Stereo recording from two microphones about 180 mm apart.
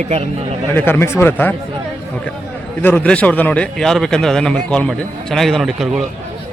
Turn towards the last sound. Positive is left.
turn(degrees=0)  # may be behind; listen again after turning